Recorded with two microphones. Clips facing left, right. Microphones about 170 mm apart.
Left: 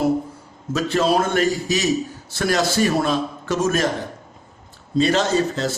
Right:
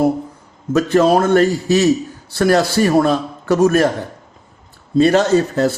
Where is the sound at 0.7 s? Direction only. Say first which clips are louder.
Right 6 dB; 55° right (ahead or behind).